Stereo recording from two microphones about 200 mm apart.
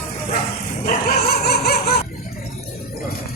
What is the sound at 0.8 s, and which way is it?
Dog, 50° left (ahead or behind).